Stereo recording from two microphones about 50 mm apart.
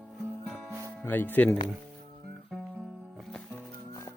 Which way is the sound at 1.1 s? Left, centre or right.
Left.